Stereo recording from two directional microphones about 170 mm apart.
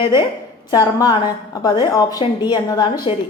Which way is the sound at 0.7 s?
25° left (ahead or behind).